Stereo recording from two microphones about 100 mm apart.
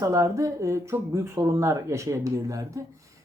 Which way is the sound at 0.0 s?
30° right (ahead or behind).